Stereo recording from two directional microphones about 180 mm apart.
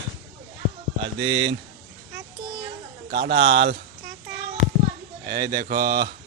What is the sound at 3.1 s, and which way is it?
Speech, 70° right (ahead or behind).